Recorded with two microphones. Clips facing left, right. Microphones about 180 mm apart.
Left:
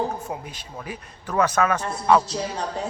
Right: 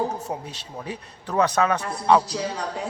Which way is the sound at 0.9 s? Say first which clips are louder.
Right 1 dB; 20° right (ahead or behind).